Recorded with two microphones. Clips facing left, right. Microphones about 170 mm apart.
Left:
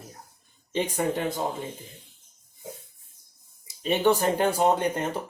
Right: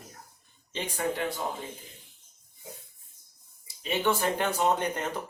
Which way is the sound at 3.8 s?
35° left (ahead or behind).